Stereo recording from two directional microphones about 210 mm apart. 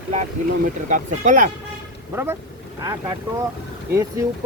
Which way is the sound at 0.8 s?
35° right (ahead or behind).